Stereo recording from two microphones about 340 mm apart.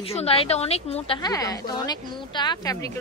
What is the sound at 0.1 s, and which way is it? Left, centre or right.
A woman's voice, centre.